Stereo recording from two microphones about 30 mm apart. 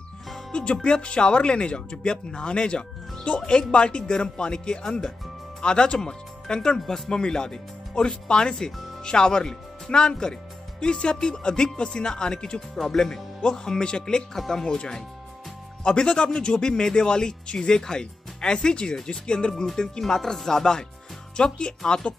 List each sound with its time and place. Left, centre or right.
0.5 s speech: left
12.5 s speech: centre
13.4 s speech: left
14.3 s speech: centre
14.6 s speech: left
21.5 s speech: left